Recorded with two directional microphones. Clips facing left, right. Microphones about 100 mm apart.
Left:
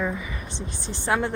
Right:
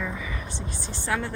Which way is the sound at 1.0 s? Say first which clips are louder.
Left 4 dB; 20° left (ahead or behind).